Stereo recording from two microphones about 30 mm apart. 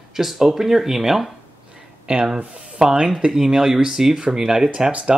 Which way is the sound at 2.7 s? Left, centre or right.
Right.